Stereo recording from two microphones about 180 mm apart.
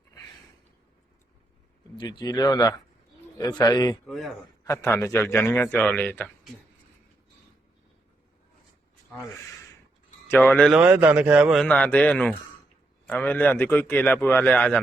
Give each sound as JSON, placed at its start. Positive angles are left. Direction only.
{"t": 2.0, "sound": "speech", "side_deg": 25}
{"t": 4.0, "sound": "speech", "side_deg": 0}
{"t": 4.6, "sound": "a man's voice", "side_deg": 15}
{"t": 10.2, "sound": "a man's voice", "side_deg": 10}
{"t": 10.7, "sound": "a man's voice", "side_deg": -5}